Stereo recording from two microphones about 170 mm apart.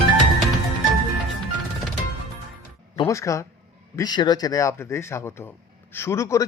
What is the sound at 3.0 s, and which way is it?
Speech, 20° left (ahead or behind).